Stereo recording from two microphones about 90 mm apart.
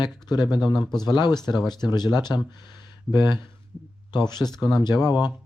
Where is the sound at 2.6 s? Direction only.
50° left (ahead or behind).